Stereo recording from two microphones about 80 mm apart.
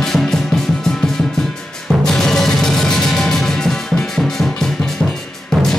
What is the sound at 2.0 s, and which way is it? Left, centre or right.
Music, centre.